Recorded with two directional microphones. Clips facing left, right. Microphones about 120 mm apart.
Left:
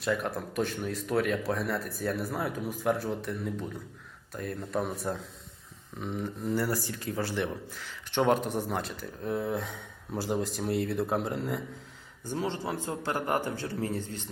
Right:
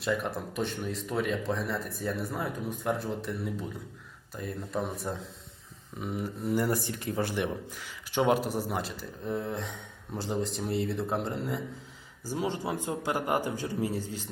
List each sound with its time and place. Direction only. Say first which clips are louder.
0.0 s a man's voice: even; centre (ahead or behind)